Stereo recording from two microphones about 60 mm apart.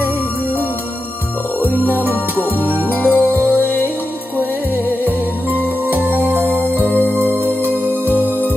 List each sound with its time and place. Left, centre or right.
1.6 s music: right
2.9 s music: left
3.3 s music: right